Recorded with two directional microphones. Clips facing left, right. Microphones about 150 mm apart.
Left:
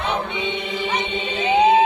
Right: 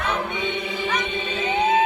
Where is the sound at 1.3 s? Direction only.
15° left (ahead or behind).